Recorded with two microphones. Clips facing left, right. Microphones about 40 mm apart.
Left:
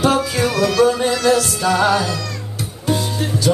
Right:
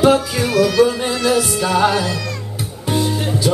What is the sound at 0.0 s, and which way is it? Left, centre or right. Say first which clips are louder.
Music: right 2 dB; centre.